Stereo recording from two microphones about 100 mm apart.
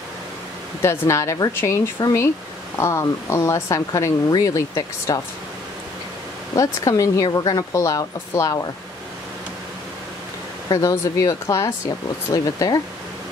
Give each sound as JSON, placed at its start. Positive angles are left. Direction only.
{"t": 0.8, "sound": "speech", "side_deg": 30}
{"t": 2.0, "sound": "speech", "side_deg": 40}
{"t": 2.8, "sound": "speech", "side_deg": 30}
{"t": 6.5, "sound": "speech", "side_deg": 30}
{"t": 10.7, "sound": "speech", "side_deg": 35}